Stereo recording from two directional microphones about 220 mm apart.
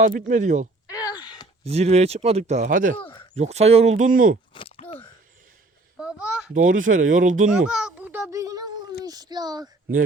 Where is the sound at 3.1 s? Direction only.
20° left (ahead or behind).